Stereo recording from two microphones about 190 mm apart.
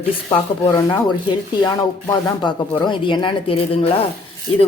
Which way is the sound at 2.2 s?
25° left (ahead or behind).